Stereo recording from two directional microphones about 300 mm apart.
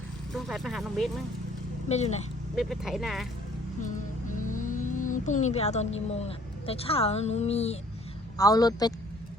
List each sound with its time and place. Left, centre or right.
0.3 s speech: centre
1.9 s a woman's voice: left
2.6 s speech: centre
3.8 s vehicle: left
6.1 s a woman's voice: left